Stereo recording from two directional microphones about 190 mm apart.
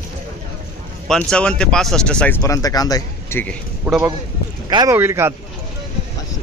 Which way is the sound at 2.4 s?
15° left (ahead or behind).